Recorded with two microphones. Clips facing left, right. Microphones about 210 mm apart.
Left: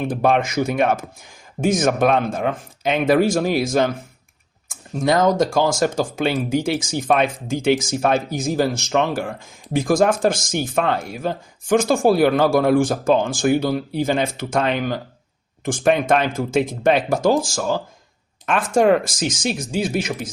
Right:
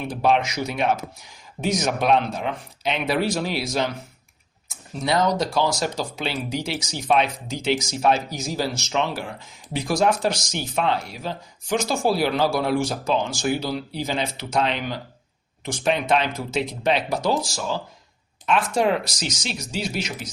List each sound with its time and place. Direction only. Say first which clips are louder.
0.0 s speech: left 3 dB; 50° left (ahead or behind)
4.9 s speech: left 5 dB; 50° left (ahead or behind)